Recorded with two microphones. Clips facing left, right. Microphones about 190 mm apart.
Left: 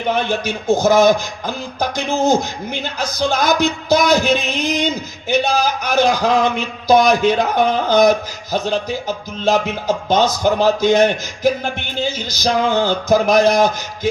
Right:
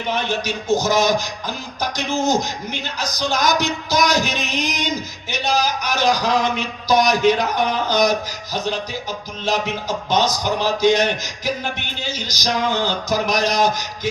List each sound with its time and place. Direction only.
0.1 s music: 50° left (ahead or behind)